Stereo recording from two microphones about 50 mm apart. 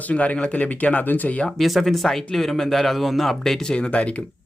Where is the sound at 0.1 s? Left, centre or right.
Left.